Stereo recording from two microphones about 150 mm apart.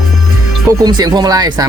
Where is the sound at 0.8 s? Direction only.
25° right (ahead or behind).